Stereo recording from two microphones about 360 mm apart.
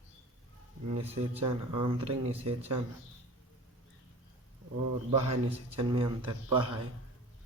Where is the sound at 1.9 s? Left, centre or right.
Centre.